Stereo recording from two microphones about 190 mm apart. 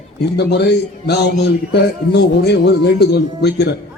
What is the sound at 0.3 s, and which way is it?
A man's voice, 60° left (ahead or behind).